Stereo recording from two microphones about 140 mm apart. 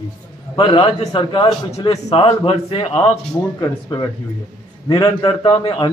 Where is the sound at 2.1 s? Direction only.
40° left (ahead or behind).